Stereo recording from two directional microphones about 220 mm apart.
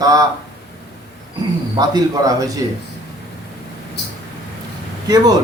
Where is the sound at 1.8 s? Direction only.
15° right (ahead or behind).